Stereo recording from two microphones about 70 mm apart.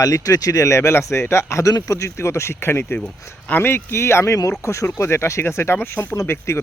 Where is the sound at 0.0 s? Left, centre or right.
Left.